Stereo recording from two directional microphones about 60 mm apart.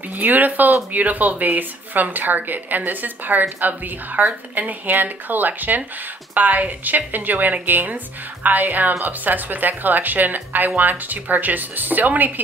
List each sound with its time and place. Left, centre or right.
0.1 s speech: right